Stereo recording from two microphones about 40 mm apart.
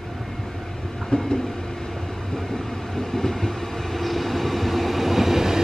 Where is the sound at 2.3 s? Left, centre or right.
Centre.